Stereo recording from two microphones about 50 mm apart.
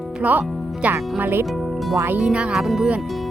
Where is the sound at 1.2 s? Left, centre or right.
Right.